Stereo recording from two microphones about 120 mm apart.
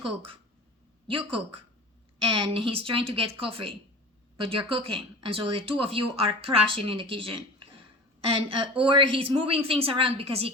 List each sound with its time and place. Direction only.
1.0 s a woman's voice: 50° right (ahead or behind)